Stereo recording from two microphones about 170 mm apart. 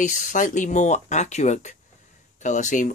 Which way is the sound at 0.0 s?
50° left (ahead or behind).